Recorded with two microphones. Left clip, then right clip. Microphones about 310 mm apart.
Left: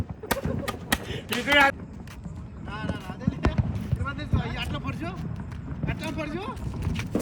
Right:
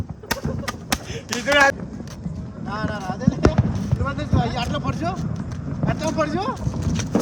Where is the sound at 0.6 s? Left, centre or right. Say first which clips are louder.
Right 2 dB; centre.